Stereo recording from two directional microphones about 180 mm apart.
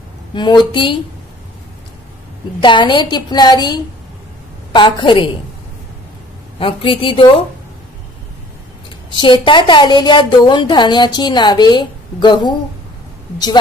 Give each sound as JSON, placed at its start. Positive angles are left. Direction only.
{"t": 0.3, "sound": "a woman's voice", "side_deg": 25}
{"t": 2.6, "sound": "a woman's voice", "side_deg": 25}
{"t": 6.6, "sound": "a woman's voice", "side_deg": 30}
{"t": 9.1, "sound": "a woman's voice", "side_deg": 25}